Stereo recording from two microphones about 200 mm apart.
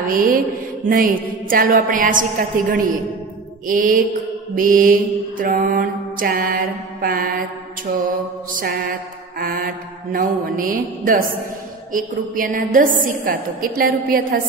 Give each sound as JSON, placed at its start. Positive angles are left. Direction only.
{"t": 0.1, "sound": "mantra", "side_deg": -45}
{"t": 8.5, "sound": "mantra", "side_deg": -45}